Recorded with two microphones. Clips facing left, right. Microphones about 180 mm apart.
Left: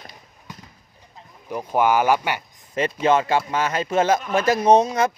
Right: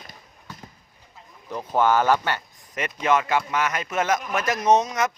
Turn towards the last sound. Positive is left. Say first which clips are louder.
# left 4 dB
turn(degrees=30)  # may be behind; listen again after turning